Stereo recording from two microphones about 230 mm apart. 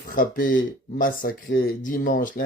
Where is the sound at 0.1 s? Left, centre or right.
Left.